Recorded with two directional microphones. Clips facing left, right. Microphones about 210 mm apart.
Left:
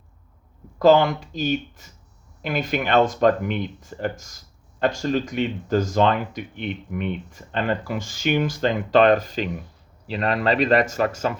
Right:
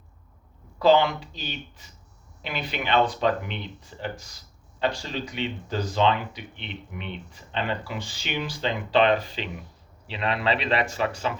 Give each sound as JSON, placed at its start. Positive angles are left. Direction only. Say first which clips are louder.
{"t": 0.8, "sound": "speech", "louder": "left 4 dB", "side_deg": 45}